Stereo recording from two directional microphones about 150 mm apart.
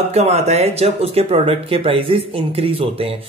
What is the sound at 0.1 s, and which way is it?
Speech, 45° right (ahead or behind).